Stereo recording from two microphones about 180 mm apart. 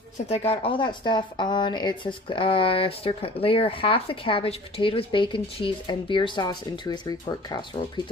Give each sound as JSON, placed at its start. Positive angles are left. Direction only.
{"t": 0.3, "sound": "speech", "side_deg": 30}